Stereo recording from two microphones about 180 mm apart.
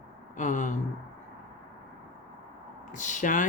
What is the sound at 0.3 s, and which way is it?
Speech, 45° left (ahead or behind).